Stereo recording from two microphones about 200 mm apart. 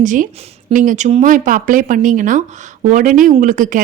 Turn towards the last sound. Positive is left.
turn(degrees=-40)  # may be behind; listen again after turning